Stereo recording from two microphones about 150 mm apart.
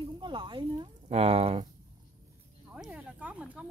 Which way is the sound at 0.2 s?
30° right (ahead or behind).